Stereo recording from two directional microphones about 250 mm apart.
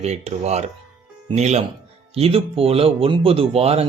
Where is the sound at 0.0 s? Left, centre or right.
Right.